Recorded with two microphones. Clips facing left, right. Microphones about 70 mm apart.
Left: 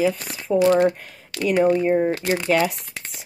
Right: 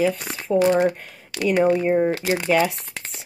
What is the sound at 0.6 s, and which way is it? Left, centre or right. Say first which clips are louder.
Speech: left 2 dB; centre.